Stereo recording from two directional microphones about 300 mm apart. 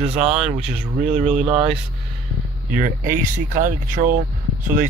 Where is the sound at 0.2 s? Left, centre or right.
Right.